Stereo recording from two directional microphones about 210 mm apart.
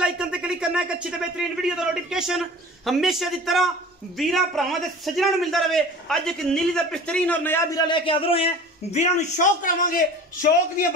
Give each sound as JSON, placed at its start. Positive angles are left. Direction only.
{"t": 0.0, "sound": "a man's voice", "side_deg": -5}